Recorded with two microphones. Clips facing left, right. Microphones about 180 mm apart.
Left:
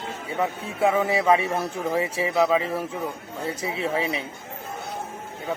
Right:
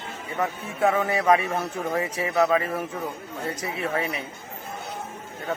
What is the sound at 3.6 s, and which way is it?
Speech, 25° left (ahead or behind).